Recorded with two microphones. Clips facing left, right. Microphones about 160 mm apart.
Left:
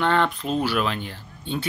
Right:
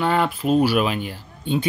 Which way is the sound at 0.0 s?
10° right (ahead or behind).